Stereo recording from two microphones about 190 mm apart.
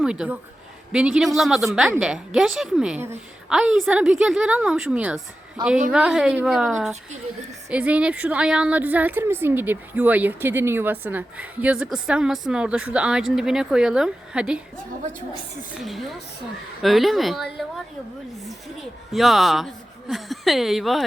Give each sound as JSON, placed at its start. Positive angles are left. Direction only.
{"t": 0.0, "sound": "a woman's voice", "side_deg": -5}
{"t": 5.6, "sound": "a woman's voice", "side_deg": -20}
{"t": 5.9, "sound": "a woman's voice", "side_deg": -5}
{"t": 15.7, "sound": "a woman's voice", "side_deg": 0}